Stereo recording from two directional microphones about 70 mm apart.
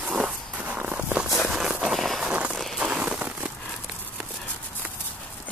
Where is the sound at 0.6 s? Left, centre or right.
Right.